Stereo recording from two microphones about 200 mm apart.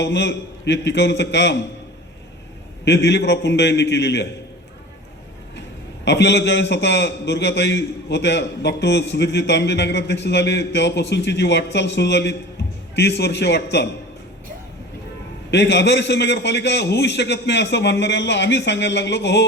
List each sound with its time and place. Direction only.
0.0 s a man's voice: 60° left (ahead or behind)
2.8 s a man's voice: 55° left (ahead or behind)
6.1 s a man's voice: 60° left (ahead or behind)
15.4 s a man's voice: 60° left (ahead or behind)